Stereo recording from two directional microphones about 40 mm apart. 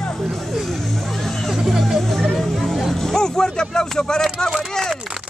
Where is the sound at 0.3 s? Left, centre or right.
Centre.